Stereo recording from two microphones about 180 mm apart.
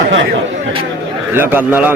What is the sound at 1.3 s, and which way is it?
Speech, 10° right (ahead or behind).